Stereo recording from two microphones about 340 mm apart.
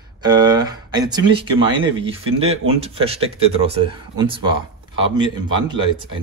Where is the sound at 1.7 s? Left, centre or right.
Centre.